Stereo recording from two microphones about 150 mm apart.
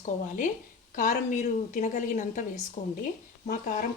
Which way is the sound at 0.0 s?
55° left (ahead or behind).